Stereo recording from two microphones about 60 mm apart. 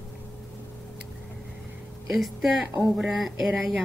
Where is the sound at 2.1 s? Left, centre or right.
Centre.